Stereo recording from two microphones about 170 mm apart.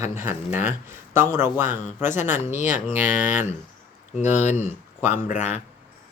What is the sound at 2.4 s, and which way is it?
Speech, 45° left (ahead or behind).